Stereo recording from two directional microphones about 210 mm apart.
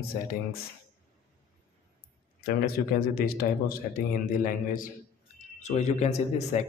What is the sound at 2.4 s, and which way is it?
Speech, 45° left (ahead or behind).